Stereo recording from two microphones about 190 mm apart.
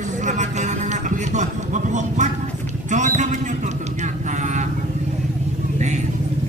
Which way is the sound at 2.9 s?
40° right (ahead or behind).